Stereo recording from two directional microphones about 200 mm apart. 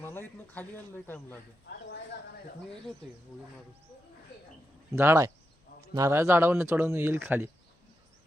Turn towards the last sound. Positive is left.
turn(degrees=-10)  # may be behind; listen again after turning